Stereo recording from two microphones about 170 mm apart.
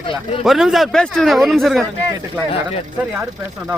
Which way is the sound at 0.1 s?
35° left (ahead or behind).